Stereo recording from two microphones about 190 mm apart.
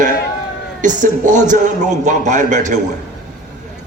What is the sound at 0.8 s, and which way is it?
A man's voice, 40° right (ahead or behind).